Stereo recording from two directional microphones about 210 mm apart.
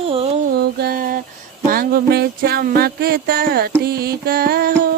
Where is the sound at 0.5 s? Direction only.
50° right (ahead or behind).